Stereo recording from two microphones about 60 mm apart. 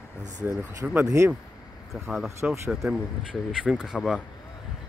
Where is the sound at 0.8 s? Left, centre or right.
Right.